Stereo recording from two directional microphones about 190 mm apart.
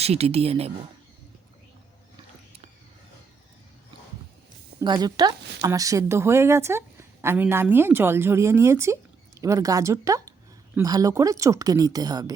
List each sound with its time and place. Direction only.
0.0 s speech: 30° right (ahead or behind)
4.8 s speech: 20° right (ahead or behind)